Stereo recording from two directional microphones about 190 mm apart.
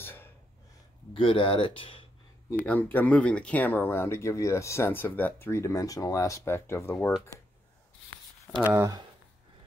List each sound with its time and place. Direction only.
0.0 s a sound: 10° left (ahead or behind)
1.1 s speech: 25° left (ahead or behind)
2.6 s speech: 10° left (ahead or behind)
8.6 s speech: 15° right (ahead or behind)